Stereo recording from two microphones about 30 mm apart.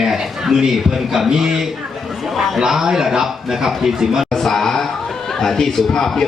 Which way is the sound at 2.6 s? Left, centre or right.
Centre.